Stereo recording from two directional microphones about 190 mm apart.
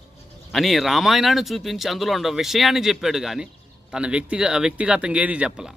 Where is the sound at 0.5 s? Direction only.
Centre (ahead or behind).